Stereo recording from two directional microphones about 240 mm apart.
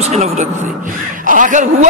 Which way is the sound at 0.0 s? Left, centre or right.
Right.